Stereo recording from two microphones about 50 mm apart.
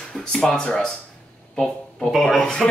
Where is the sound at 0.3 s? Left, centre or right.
Centre.